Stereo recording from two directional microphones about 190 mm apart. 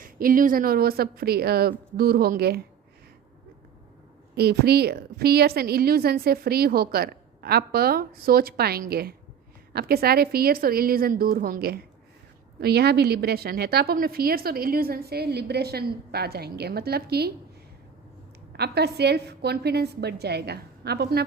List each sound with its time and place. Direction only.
0.0 s a woman's voice: 45° right (ahead or behind)
4.4 s a woman's voice: 55° right (ahead or behind)
18.5 s a woman's voice: 60° right (ahead or behind)